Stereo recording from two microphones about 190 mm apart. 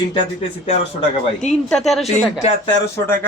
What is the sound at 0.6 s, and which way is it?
Speech, 35° left (ahead or behind).